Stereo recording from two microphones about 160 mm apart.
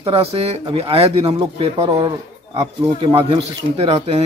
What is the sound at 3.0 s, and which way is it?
Speech, 30° right (ahead or behind).